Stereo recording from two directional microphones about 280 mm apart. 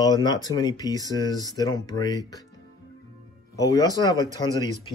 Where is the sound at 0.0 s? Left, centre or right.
Centre.